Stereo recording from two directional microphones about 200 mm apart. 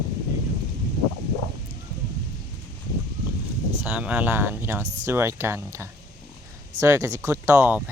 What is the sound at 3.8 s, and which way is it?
Speech, 5° right (ahead or behind).